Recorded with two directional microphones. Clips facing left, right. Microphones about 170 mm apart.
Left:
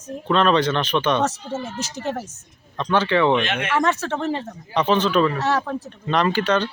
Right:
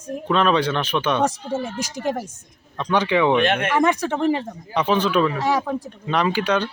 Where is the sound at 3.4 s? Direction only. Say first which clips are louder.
Right 5 dB; 55° right (ahead or behind).